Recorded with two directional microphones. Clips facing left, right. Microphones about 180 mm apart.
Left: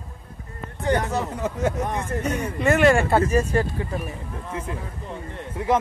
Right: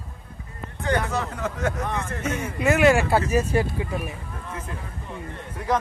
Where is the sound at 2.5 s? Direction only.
5° right (ahead or behind).